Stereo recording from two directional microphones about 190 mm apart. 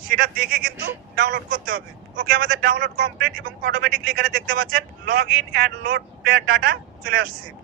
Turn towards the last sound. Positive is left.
turn(degrees=-50)  # may be behind; listen again after turning